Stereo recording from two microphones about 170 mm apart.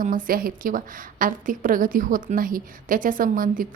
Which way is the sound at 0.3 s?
60° right (ahead or behind).